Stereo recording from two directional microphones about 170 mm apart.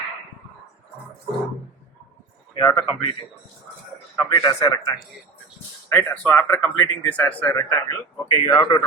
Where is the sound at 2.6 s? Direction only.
20° left (ahead or behind).